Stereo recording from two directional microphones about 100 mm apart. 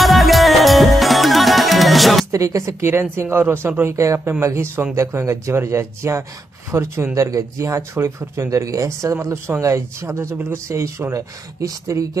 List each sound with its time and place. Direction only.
0.0 s music: centre (ahead or behind)
2.3 s speech: 35° right (ahead or behind)